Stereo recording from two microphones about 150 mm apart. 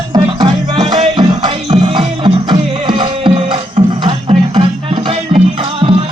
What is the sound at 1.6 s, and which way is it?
Music, 50° right (ahead or behind).